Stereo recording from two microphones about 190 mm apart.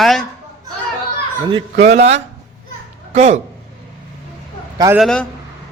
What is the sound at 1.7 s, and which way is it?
Speech, 35° right (ahead or behind).